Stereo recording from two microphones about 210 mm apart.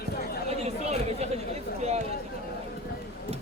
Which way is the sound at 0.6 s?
30° right (ahead or behind).